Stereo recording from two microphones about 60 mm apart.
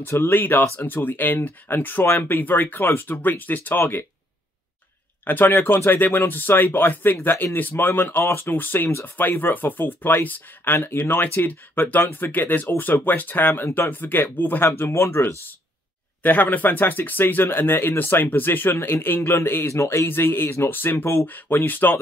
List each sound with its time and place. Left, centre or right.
0.0 s speech: left
5.2 s speech: left
13.5 s speech: left
13.7 s speech: left
16.2 s speech: left
19.7 s speech: left
20.1 s speech: left